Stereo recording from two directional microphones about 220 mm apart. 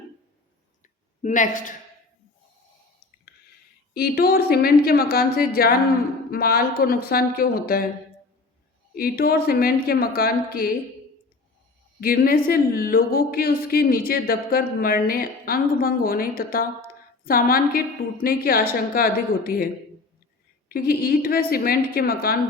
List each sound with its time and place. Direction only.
1.2 s speech: 35° left (ahead or behind)
3.9 s speech: 45° left (ahead or behind)
9.0 s speech: 45° left (ahead or behind)
11.9 s speech: 40° left (ahead or behind)
20.7 s speech: 45° left (ahead or behind)